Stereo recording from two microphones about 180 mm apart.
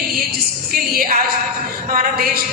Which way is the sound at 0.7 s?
50° right (ahead or behind).